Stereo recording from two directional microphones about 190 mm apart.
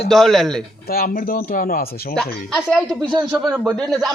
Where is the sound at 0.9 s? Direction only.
50° left (ahead or behind).